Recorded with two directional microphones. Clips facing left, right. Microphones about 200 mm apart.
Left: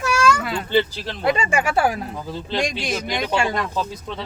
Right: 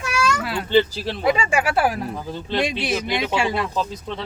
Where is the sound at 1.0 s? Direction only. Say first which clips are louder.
Right 1 dB; 5° right (ahead or behind).